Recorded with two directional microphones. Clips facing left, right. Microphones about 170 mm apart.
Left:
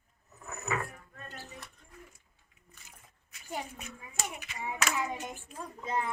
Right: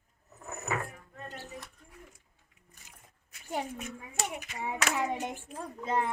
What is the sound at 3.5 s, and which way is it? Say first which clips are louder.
Hands: right 4 dB; 50° right (ahead or behind).